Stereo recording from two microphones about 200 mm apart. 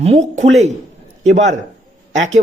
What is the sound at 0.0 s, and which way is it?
A man's voice, 35° right (ahead or behind).